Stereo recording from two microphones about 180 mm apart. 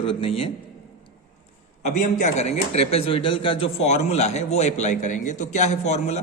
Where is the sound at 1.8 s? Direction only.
40° left (ahead or behind).